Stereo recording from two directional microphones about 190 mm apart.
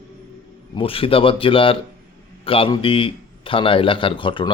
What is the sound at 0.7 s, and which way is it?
A man's voice, 30° left (ahead or behind).